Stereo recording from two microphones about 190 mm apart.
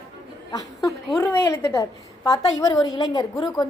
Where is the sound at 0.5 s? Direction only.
20° left (ahead or behind).